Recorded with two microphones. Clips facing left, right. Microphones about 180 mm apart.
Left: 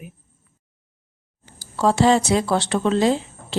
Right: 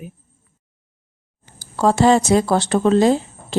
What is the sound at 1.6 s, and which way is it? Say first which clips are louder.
Speech: right 2 dB; 45° right (ahead or behind).